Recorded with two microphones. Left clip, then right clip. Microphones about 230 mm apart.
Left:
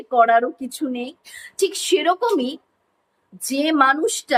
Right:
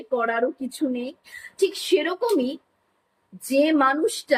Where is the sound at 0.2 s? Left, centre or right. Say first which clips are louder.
Left 12 dB; centre.